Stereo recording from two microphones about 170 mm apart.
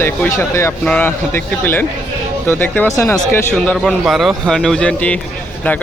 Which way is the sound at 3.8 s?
Centre (ahead or behind).